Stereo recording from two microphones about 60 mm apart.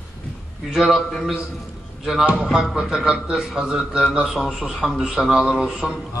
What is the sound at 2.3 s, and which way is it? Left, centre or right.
Music, centre.